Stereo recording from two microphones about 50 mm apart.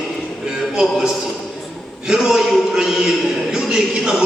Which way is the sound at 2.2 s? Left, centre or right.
Centre.